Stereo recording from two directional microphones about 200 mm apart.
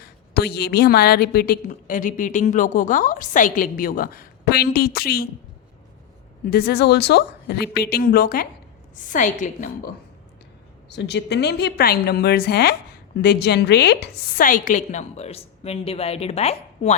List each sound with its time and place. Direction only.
0.0 s a woman's voice: 55° left (ahead or behind)
6.4 s a woman's voice: 50° left (ahead or behind)
10.8 s a woman's voice: 60° left (ahead or behind); by 16.9 s 30° left (ahead or behind)